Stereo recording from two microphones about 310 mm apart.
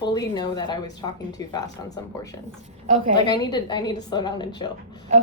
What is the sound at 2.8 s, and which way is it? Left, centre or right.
Speech, right.